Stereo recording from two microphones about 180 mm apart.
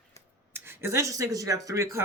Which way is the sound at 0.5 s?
10° right (ahead or behind).